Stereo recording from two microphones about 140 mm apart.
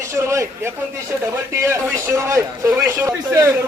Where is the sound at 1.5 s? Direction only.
20° right (ahead or behind).